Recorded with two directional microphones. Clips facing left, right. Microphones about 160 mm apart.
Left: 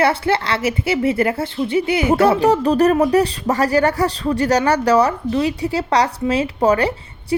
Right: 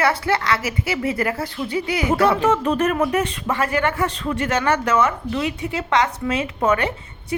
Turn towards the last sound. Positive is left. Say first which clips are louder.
# left 5 dB
turn(degrees=35)  # may be behind; listen again after turning